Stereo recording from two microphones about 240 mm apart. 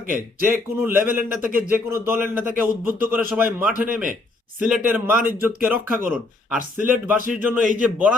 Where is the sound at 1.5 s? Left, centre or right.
Right.